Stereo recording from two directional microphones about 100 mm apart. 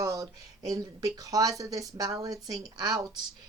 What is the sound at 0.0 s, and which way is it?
Speech, 35° right (ahead or behind).